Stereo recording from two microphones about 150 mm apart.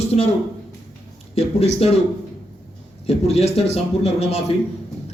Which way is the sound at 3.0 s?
45° left (ahead or behind).